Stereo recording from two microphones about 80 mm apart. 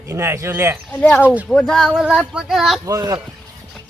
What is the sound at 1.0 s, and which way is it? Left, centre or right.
Speech, centre.